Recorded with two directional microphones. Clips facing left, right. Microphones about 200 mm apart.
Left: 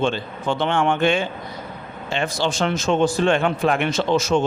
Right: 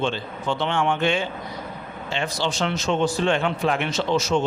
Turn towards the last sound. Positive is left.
turn(degrees=50)  # may be behind; listen again after turning